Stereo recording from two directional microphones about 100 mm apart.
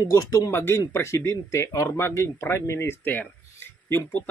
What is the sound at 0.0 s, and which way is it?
Speech, 35° left (ahead or behind).